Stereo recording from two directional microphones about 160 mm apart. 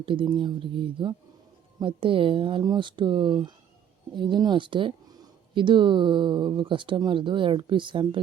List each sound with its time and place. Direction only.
0.0 s speech: 30° right (ahead or behind)